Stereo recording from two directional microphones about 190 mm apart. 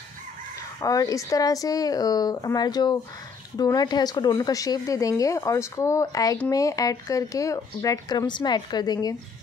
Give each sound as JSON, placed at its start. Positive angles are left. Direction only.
{"t": 0.7, "sound": "speech", "side_deg": 20}